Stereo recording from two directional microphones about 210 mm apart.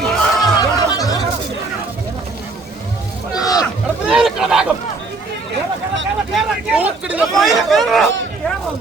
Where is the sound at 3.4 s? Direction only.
15° left (ahead or behind).